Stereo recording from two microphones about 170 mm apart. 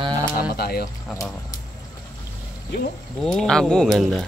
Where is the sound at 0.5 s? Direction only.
65° left (ahead or behind).